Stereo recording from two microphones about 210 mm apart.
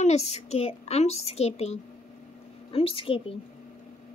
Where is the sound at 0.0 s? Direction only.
30° left (ahead or behind).